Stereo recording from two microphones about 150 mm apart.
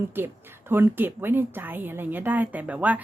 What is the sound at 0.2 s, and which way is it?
Speech, 15° right (ahead or behind).